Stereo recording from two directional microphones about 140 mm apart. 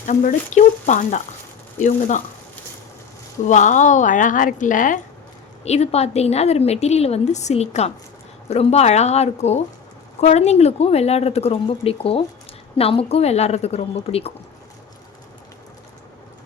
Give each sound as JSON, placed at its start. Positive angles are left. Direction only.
{"t": 0.0, "sound": "speech", "side_deg": 65}
{"t": 3.4, "sound": "speech", "side_deg": 60}
{"t": 5.6, "sound": "a woman's voice", "side_deg": 50}